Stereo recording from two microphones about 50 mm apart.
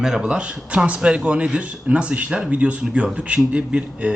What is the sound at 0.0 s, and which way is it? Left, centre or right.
Speech, centre.